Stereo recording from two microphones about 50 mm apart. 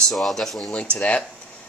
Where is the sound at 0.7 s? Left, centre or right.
Left.